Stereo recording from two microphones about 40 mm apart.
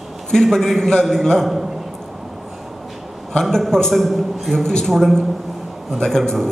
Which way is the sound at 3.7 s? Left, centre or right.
Centre.